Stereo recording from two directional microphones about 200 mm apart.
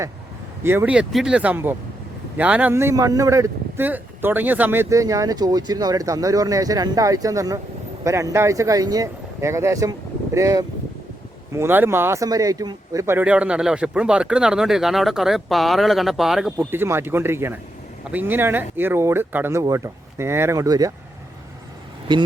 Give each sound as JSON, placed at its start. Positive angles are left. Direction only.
{"t": 0.6, "sound": "speech", "side_deg": -10}
{"t": 22.1, "sound": "speech", "side_deg": -25}